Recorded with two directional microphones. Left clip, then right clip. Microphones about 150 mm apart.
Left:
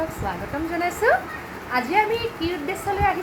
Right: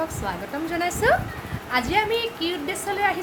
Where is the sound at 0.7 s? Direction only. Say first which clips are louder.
Left 1 dB; centre (ahead or behind).